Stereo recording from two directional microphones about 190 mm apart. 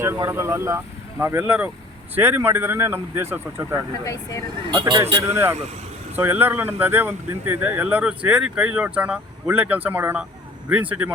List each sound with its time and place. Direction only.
0.0 s speech: 15° right (ahead or behind)
4.0 s speech: 15° left (ahead or behind)
4.7 s speech: 20° right (ahead or behind)